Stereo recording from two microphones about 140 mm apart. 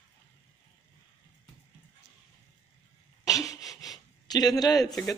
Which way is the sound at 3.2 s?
25° left (ahead or behind).